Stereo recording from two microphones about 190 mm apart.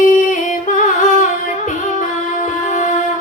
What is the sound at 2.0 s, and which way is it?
Music, 40° left (ahead or behind).